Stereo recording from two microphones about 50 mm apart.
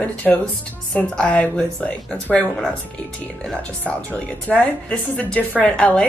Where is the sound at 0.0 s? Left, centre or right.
Left.